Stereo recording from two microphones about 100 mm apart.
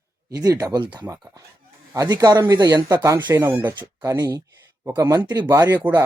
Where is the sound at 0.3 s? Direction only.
35° right (ahead or behind).